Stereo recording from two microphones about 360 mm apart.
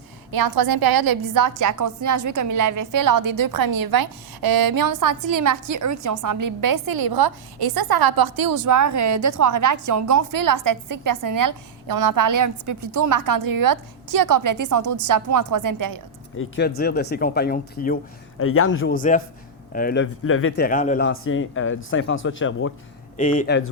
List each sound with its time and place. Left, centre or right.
0.3 s a woman's voice: right
16.4 s speech: left
18.3 s speech: left
20.7 s speech: left
21.1 s speech: left
23.1 s speech: left